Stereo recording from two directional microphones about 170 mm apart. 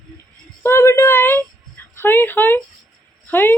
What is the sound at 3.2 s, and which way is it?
Speech, 10° left (ahead or behind).